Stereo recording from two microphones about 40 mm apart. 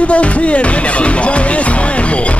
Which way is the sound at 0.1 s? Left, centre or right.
Left.